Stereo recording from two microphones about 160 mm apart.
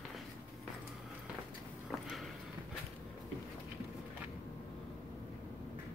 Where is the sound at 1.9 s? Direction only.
Centre (ahead or behind).